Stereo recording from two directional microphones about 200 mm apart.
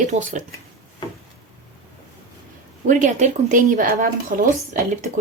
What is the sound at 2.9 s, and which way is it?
Speech, 35° right (ahead or behind).